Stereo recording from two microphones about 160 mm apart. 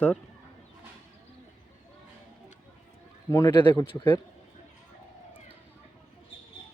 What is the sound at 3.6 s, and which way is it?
Speech, 30° left (ahead or behind).